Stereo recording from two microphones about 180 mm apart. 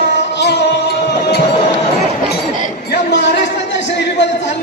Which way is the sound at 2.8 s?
70° left (ahead or behind).